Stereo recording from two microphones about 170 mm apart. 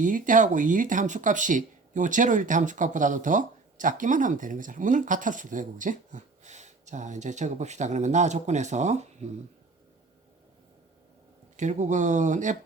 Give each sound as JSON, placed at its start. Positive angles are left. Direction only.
{"t": 0.0, "sound": "speech", "side_deg": -50}
{"t": 11.5, "sound": "speech", "side_deg": -45}